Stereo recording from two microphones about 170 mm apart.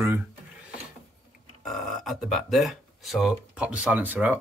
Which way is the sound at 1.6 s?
Centre (ahead or behind).